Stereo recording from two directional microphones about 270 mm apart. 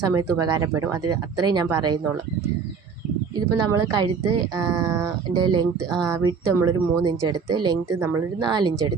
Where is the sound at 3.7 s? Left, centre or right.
Centre.